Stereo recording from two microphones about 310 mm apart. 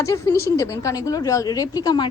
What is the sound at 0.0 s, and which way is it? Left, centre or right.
A woman's voice, centre.